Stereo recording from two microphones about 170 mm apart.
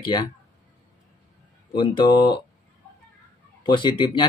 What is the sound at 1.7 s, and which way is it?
Speech, 30° left (ahead or behind).